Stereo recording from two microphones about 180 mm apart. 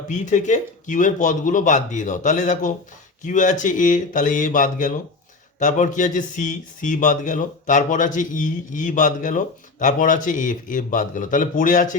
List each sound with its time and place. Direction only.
0.1 s speech: 40° left (ahead or behind)